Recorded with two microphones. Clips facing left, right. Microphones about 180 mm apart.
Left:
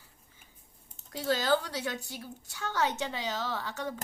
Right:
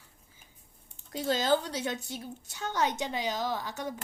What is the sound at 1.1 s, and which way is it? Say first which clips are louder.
A woman's voice: right 1 dB; 20° right (ahead or behind).